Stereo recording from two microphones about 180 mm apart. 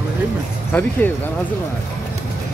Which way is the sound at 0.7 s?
10° left (ahead or behind).